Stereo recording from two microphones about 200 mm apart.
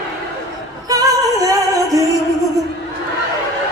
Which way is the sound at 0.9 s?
15° right (ahead or behind).